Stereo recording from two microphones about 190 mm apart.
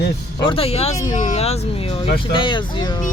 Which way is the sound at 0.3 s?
30° left (ahead or behind).